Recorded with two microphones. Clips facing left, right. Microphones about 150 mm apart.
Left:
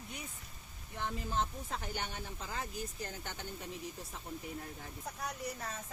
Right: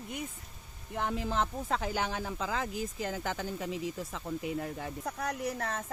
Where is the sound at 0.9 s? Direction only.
90° right.